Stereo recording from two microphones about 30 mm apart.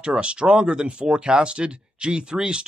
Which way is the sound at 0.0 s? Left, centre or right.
Right.